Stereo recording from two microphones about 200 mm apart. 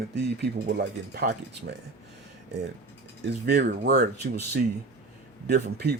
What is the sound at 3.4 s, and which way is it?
Speech, 55° right (ahead or behind).